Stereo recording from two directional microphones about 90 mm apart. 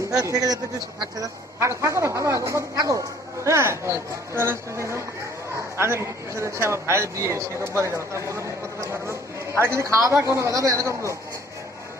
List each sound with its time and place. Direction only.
0.1 s a man's voice: 40° right (ahead or behind)
1.5 s speech: 30° right (ahead or behind)